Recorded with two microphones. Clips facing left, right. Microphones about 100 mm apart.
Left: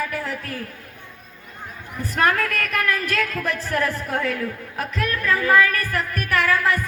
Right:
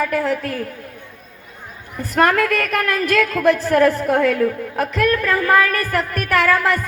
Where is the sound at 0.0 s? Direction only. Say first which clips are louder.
Right 8 dB; 70° right (ahead or behind).